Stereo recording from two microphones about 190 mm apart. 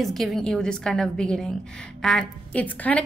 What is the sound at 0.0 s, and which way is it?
A woman's voice, centre (ahead or behind).